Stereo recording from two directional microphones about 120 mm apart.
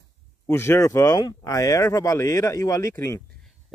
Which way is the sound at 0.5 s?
20° left (ahead or behind).